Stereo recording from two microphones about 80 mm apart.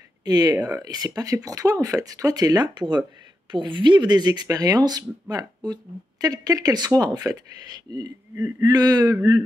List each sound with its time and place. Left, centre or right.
0.2 s speech: right
3.5 s speech: right
9.1 s a sound: right